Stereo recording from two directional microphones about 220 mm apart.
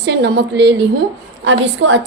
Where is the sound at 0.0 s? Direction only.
50° right (ahead or behind).